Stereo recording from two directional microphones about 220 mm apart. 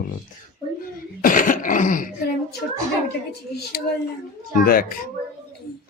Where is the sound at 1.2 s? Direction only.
35° left (ahead or behind).